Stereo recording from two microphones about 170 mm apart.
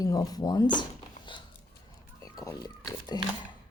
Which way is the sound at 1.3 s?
30° left (ahead or behind).